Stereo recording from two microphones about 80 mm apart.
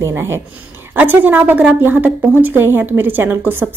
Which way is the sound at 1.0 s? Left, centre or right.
Right.